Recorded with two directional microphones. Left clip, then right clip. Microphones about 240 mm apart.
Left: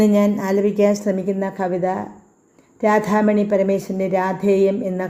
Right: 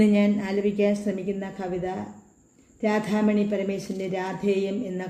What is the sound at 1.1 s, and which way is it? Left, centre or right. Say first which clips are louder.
A woman's voice: left 8 dB; centre.